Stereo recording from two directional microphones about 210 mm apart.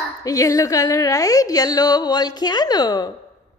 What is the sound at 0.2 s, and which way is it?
A woman's voice, 15° left (ahead or behind).